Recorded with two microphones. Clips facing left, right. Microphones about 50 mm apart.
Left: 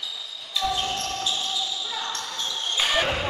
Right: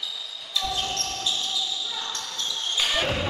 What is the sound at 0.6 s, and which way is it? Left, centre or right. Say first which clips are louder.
Basketball bounce: left 3 dB; centre.